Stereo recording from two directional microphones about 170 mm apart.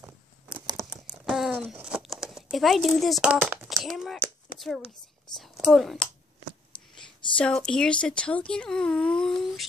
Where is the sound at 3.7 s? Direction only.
Centre (ahead or behind).